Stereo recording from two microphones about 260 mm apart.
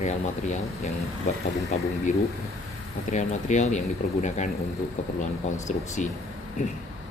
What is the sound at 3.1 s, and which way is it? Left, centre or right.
Speech, left.